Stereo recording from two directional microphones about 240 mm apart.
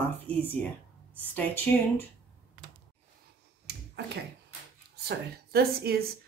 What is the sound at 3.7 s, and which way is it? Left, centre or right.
Finger snapping, right.